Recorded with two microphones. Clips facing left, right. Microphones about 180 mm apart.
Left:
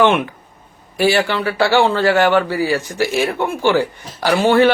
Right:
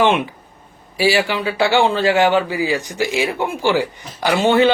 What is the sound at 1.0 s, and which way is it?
Speech, 10° right (ahead or behind).